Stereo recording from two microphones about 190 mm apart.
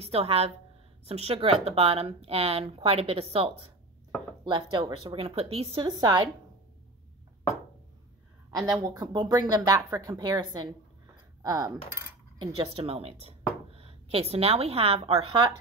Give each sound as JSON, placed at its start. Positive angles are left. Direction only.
{"t": 0.0, "sound": "speech", "side_deg": -30}
{"t": 8.7, "sound": "speech", "side_deg": -20}